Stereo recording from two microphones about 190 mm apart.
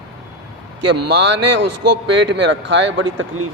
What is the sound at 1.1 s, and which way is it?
A man's voice, 65° right (ahead or behind).